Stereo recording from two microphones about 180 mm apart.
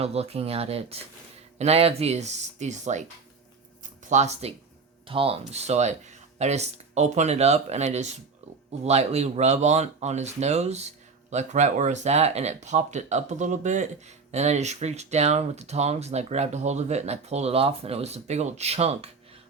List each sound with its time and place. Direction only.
0.0 s speech: 35° right (ahead or behind)
4.1 s speech: 40° right (ahead or behind)